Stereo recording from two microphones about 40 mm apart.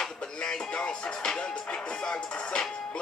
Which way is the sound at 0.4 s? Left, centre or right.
Centre.